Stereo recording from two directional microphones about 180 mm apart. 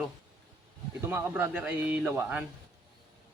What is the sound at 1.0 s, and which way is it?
Speech, 10° right (ahead or behind).